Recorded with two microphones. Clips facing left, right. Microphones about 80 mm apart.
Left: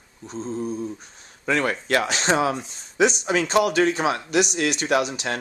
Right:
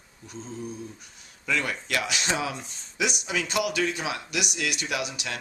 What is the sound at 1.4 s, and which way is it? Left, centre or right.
Speech, left.